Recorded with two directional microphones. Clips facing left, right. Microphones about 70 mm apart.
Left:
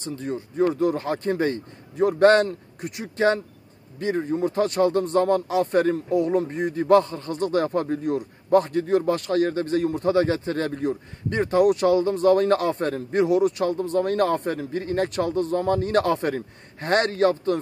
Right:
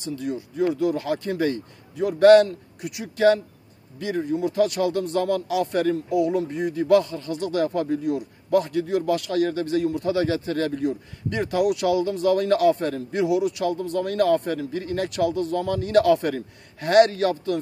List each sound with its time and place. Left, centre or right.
0.0 s a man's voice: left